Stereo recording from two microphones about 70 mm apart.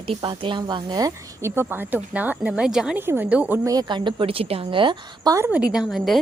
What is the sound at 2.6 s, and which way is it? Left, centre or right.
Speech, centre.